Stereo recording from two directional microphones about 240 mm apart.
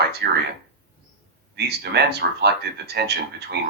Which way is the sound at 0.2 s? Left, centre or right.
Right.